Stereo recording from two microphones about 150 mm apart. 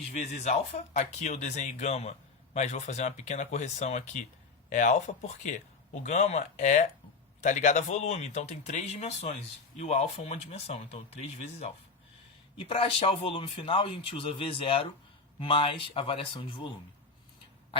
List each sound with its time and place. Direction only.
0.4 s speech: 50° left (ahead or behind)
12.5 s speech: 40° left (ahead or behind)